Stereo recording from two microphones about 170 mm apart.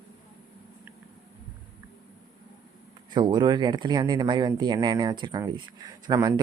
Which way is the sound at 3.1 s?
25° right (ahead or behind).